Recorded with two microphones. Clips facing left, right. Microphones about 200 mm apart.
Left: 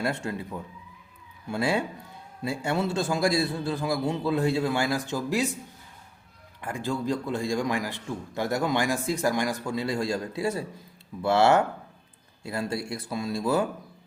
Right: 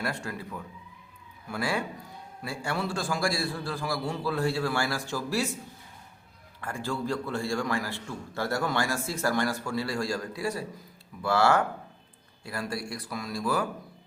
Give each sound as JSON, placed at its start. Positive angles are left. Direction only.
{"t": 0.0, "sound": "a man's voice", "side_deg": 25}
{"t": 6.6, "sound": "a man's voice", "side_deg": 15}